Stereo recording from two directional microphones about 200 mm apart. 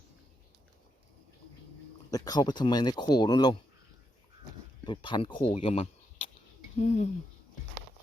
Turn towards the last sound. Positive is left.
turn(degrees=35)  # may be behind; listen again after turning